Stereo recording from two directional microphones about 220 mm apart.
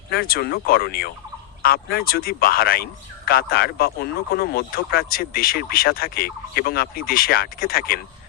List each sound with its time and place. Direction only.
0.1 s speech: 45° left (ahead or behind)